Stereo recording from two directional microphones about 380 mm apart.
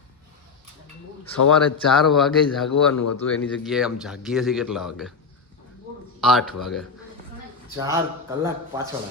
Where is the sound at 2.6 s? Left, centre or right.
Left.